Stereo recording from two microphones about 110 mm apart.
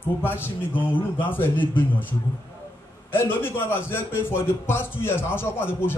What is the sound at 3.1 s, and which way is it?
A man's voice, 20° left (ahead or behind).